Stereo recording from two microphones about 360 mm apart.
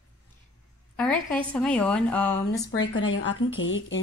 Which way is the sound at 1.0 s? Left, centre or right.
Centre.